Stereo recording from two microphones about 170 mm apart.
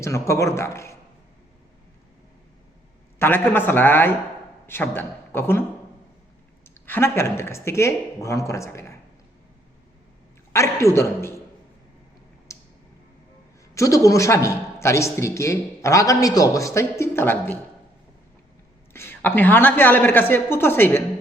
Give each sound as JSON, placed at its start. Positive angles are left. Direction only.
{"t": 0.0, "sound": "a man's voice", "side_deg": 15}
{"t": 3.2, "sound": "a man's voice", "side_deg": 10}
{"t": 6.8, "sound": "a man's voice", "side_deg": 15}
{"t": 10.5, "sound": "a man's voice", "side_deg": 15}
{"t": 12.5, "sound": "a sound", "side_deg": 15}
{"t": 13.7, "sound": "a man's voice", "side_deg": 20}
{"t": 18.9, "sound": "a man's voice", "side_deg": 15}